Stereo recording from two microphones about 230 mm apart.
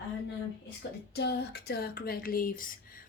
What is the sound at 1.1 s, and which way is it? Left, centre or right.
Speech, left.